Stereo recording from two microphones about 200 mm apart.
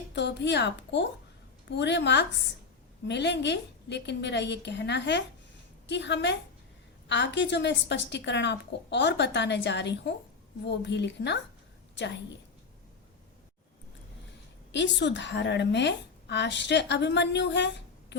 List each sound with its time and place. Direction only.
0.1 s a woman's voice: 60° left (ahead or behind)
14.7 s a woman's voice: 60° left (ahead or behind)